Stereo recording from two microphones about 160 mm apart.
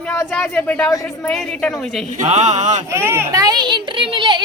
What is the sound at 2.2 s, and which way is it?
Speech, 45° right (ahead or behind).